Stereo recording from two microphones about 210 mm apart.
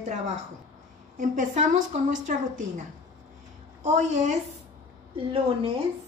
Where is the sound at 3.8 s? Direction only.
35° right (ahead or behind).